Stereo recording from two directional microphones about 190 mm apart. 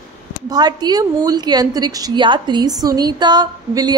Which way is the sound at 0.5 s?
20° right (ahead or behind).